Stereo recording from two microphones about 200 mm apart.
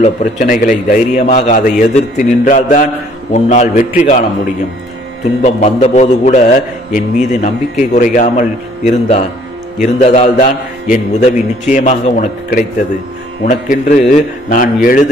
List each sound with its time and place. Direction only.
0.0 s a man's voice: 40° left (ahead or behind)
5.4 s a man's voice: 35° left (ahead or behind)